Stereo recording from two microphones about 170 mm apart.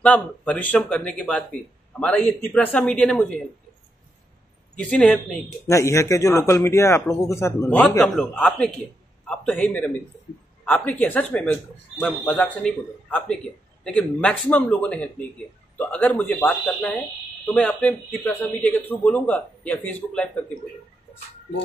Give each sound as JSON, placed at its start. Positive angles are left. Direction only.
{"t": 0.0, "sound": "speech", "side_deg": 10}
{"t": 4.8, "sound": "speech", "side_deg": 5}
{"t": 5.7, "sound": "speech", "side_deg": 15}
{"t": 13.8, "sound": "speech", "side_deg": 5}